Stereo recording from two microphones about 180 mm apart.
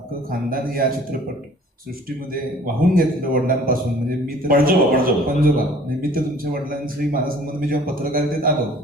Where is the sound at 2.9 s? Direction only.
50° right (ahead or behind).